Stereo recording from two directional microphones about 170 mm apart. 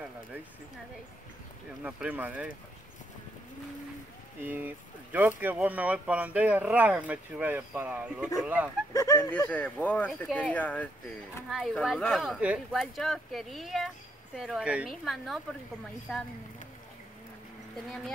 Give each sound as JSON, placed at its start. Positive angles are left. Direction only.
{"t": 1.8, "sound": "speech", "side_deg": -5}
{"t": 4.4, "sound": "speech", "side_deg": -10}
{"t": 8.9, "sound": "speech", "side_deg": 20}
{"t": 9.5, "sound": "speech", "side_deg": 10}